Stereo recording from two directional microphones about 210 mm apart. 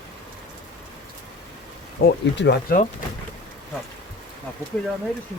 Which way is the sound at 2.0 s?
50° left (ahead or behind).